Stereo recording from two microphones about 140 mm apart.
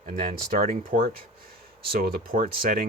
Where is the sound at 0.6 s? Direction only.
90° right.